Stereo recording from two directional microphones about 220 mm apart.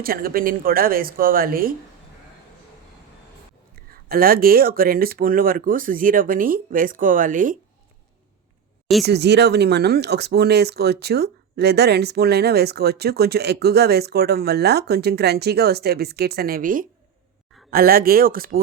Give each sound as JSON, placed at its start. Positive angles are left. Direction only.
{"t": 0.0, "sound": "speech", "side_deg": -40}
{"t": 4.1, "sound": "speech", "side_deg": -40}
{"t": 9.0, "sound": "speech", "side_deg": -50}